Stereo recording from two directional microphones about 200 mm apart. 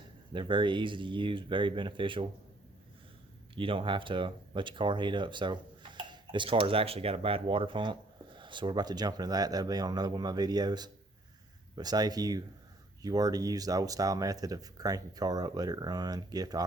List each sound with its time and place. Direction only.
0.3 s speech: 25° right (ahead or behind)
3.5 s speech: 25° right (ahead or behind)